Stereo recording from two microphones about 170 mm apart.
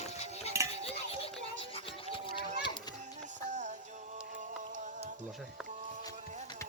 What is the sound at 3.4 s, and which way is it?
Music, 45° right (ahead or behind).